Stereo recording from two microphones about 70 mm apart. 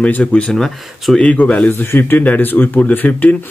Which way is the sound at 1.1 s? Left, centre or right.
Centre.